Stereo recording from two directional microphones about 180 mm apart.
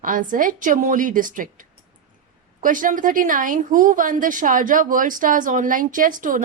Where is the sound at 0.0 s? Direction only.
50° right (ahead or behind).